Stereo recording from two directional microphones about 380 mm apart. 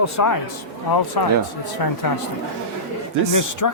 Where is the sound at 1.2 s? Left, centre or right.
Left.